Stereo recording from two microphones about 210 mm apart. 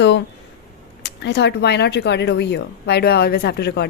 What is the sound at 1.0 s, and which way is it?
Speech, 55° left (ahead or behind).